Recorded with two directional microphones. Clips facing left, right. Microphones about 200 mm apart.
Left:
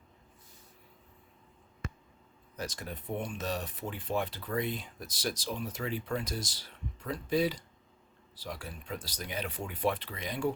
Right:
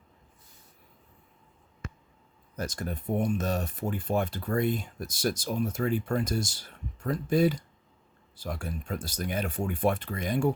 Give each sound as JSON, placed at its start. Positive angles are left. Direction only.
{"t": 2.6, "sound": "speech", "side_deg": -45}